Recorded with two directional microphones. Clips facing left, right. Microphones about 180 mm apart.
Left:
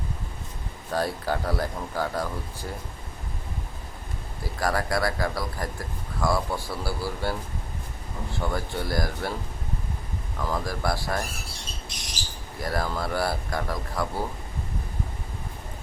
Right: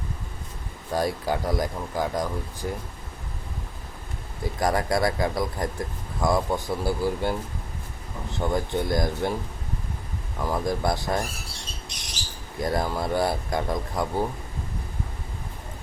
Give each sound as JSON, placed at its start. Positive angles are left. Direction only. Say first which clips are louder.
{"t": 0.9, "sound": "speech", "louder": "right 2 dB", "side_deg": -15}
{"t": 4.4, "sound": "speech", "louder": "right 3 dB", "side_deg": -20}
{"t": 10.4, "sound": "speech", "louder": "right 3 dB", "side_deg": -20}
{"t": 12.6, "sound": "speech", "louder": "right 3 dB", "side_deg": -20}